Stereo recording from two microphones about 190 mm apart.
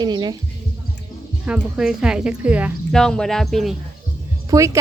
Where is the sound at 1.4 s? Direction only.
5° right (ahead or behind).